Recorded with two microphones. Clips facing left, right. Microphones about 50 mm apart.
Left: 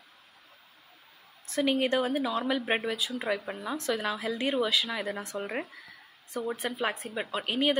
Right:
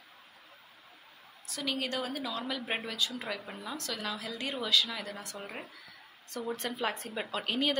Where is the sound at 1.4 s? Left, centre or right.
Left.